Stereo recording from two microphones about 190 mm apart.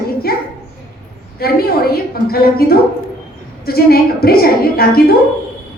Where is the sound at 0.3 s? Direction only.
55° left (ahead or behind).